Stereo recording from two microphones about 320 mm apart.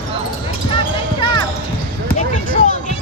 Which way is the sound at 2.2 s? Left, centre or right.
Left.